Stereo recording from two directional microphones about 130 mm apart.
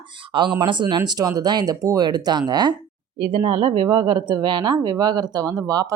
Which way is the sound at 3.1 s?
45° right (ahead or behind).